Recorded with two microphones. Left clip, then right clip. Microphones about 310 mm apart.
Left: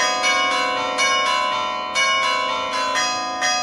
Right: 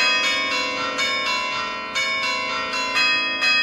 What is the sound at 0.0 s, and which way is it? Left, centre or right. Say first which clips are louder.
Change ringing: left 1 dB; left.